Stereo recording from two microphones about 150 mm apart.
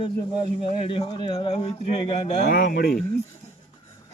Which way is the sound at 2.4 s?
90° left.